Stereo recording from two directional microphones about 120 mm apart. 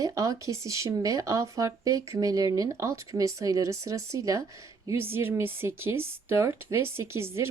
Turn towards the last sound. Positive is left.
turn(degrees=-20)  # may be behind; listen again after turning